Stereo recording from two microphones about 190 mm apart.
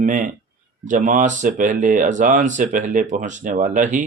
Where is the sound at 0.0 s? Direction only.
45° right (ahead or behind).